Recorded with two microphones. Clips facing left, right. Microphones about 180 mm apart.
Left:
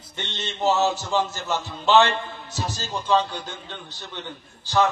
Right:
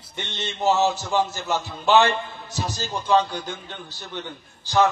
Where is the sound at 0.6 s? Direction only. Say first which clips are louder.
Right 1 dB; 15° right (ahead or behind).